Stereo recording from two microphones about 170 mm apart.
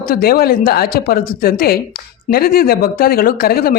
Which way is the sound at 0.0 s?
60° left (ahead or behind).